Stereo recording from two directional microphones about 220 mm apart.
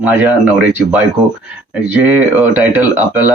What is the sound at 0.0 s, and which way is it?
Speech, 10° right (ahead or behind).